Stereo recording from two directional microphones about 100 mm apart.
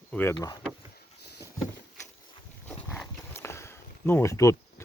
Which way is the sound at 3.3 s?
25° left (ahead or behind).